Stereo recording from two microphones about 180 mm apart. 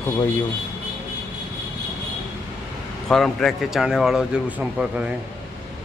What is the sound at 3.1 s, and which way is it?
Speech, centre (ahead or behind).